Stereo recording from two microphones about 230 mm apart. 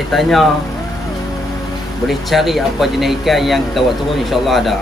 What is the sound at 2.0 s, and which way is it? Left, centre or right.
Speech, centre.